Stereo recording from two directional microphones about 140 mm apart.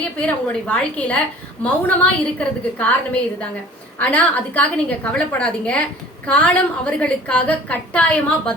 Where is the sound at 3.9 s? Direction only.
10° left (ahead or behind).